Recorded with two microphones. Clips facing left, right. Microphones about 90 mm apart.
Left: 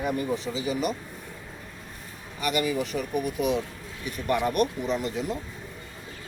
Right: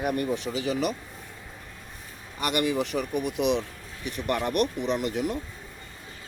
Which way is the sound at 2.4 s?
65° right (ahead or behind).